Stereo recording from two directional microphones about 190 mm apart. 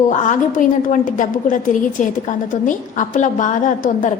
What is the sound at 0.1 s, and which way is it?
A woman's voice, 40° left (ahead or behind).